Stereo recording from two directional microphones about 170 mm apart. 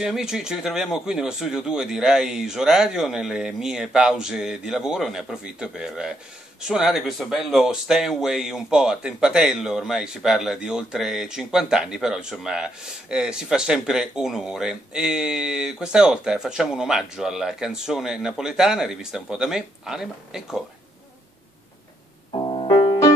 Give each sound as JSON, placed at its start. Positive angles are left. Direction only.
{"t": 0.0, "sound": "speech", "side_deg": -5}
{"t": 22.3, "sound": "music", "side_deg": 30}